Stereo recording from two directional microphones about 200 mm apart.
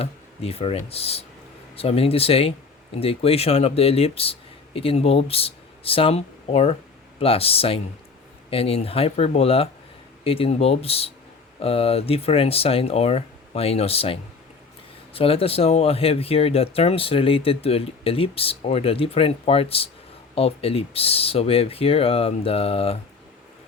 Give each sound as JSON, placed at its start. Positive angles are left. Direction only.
{"t": 0.0, "sound": "speech", "side_deg": 30}